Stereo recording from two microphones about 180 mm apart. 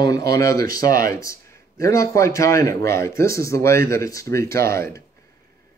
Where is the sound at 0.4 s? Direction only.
20° left (ahead or behind).